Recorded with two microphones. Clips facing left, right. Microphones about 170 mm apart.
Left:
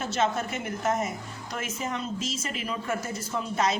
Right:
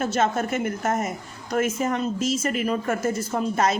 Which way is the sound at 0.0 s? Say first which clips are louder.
Right 4 dB; 50° right (ahead or behind).